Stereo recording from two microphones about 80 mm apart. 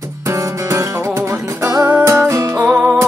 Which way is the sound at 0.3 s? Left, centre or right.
Right.